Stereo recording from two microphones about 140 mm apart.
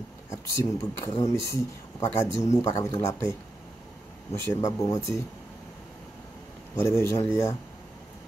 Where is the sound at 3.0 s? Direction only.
20° left (ahead or behind).